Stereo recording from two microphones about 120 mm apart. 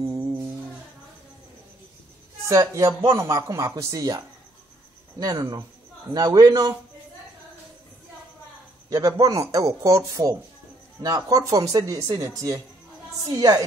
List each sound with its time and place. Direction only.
0.1 s music: 30° right (ahead or behind)
2.4 s speech: 25° right (ahead or behind)
5.2 s a man's voice: 35° right (ahead or behind)
8.9 s a man's voice: 30° right (ahead or behind)